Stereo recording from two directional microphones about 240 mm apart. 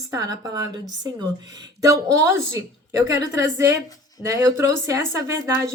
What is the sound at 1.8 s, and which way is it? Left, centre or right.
Speech, centre.